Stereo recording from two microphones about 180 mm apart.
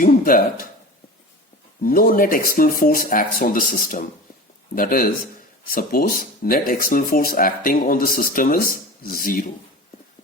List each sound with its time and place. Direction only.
0.0 s speech: 50° left (ahead or behind)
1.8 s speech: 55° left (ahead or behind)